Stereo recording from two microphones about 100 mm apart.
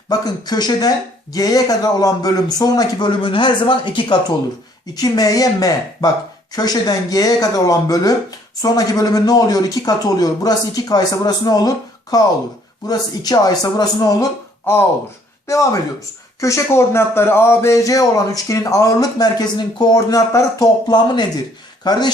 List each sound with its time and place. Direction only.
0.1 s speech: 45° left (ahead or behind)
3.1 s speech: 55° left (ahead or behind)
4.9 s speech: 40° left (ahead or behind)
14.6 s speech: 20° left (ahead or behind)
15.4 s speech: 30° left (ahead or behind)